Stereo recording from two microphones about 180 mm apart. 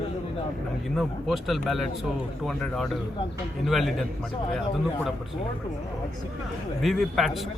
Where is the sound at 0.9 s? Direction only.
Centre (ahead or behind).